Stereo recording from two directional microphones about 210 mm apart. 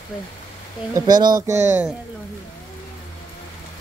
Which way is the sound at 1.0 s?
20° right (ahead or behind).